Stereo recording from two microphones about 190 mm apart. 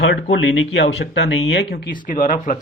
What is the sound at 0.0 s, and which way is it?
Speech, 70° left (ahead or behind).